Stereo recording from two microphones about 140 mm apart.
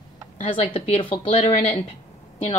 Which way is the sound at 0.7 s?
50° left (ahead or behind).